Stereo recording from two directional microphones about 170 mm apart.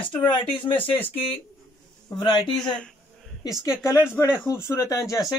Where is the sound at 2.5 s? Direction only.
5° left (ahead or behind).